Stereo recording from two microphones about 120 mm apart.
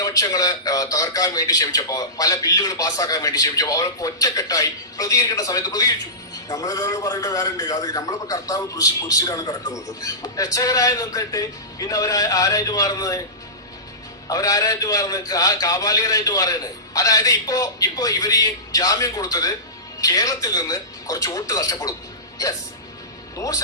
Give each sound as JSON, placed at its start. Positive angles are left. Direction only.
{"t": 0.0, "sound": "a man's voice", "side_deg": 30}
{"t": 14.3, "sound": "a man's voice", "side_deg": 30}
{"t": 23.4, "sound": "a man's voice", "side_deg": 30}